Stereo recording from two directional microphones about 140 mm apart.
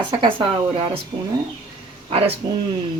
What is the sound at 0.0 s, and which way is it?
Speech, 35° right (ahead or behind).